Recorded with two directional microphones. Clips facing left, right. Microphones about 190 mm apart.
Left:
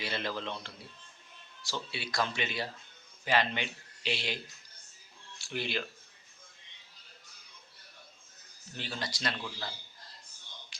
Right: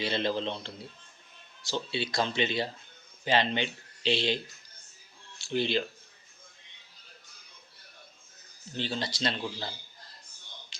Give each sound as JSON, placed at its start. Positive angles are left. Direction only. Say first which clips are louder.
{"t": 0.0, "sound": "speech", "louder": "right 6 dB", "side_deg": -25}
{"t": 5.5, "sound": "speech", "louder": "right 7 dB", "side_deg": -25}
{"t": 8.7, "sound": "speech", "louder": "right 6 dB", "side_deg": -30}